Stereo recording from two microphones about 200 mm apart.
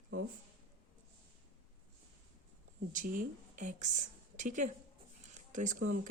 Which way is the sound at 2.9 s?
45° right (ahead or behind).